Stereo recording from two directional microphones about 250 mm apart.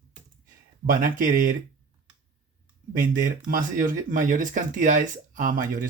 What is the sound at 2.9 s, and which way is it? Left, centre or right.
Speech, right.